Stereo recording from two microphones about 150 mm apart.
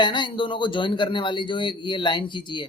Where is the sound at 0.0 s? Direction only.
30° left (ahead or behind).